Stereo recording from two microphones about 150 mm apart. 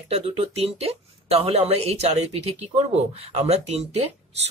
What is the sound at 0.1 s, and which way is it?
Speech, 40° right (ahead or behind).